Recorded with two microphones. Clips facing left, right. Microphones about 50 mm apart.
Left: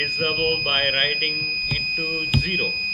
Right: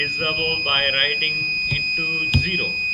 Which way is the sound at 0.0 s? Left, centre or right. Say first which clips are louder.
Even; centre.